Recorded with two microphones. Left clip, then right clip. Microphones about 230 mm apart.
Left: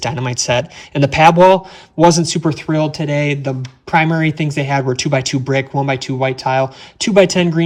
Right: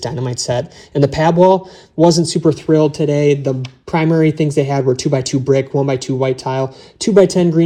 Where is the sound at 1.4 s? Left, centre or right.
Left.